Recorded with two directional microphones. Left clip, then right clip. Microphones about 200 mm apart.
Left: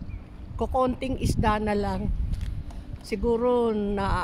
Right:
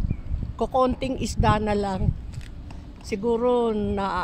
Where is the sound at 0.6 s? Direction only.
15° right (ahead or behind).